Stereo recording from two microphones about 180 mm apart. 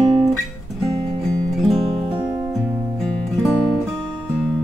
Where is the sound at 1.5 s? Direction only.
Centre (ahead or behind).